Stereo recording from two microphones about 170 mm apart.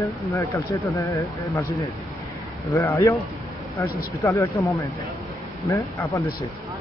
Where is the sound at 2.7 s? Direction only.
15° left (ahead or behind).